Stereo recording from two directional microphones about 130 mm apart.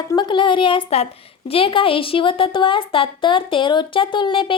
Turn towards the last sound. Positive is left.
turn(degrees=40)  # may be behind; listen again after turning